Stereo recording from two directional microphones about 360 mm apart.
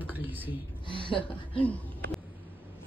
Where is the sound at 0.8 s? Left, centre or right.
Centre.